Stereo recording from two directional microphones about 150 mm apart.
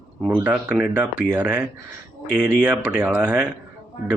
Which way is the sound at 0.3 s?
10° right (ahead or behind).